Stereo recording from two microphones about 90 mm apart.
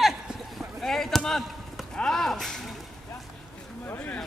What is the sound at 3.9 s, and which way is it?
Speech, 15° left (ahead or behind).